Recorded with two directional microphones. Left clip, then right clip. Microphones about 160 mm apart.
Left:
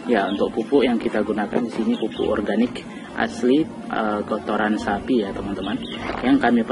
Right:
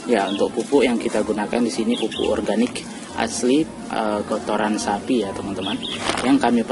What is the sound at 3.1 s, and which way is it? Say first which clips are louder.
Speech: even; 5° right (ahead or behind).